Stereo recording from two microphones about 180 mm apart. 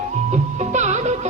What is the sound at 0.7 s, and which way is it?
Music, 40° right (ahead or behind).